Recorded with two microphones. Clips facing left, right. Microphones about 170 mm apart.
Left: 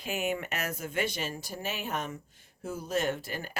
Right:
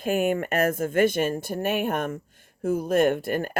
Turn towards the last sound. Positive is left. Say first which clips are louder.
# right 10 dB
turn(degrees=-55)  # may be behind; listen again after turning